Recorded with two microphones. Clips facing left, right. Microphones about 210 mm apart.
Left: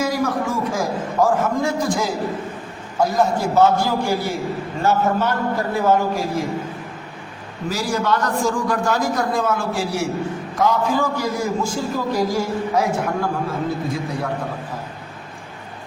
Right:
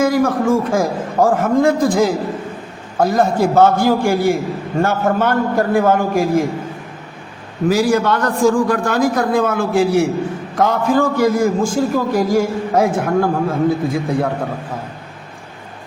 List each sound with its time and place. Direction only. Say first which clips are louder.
0.0 s a man's voice: right 6 dB; 55° right (ahead or behind)
7.7 s a man's voice: right 6 dB; 60° right (ahead or behind)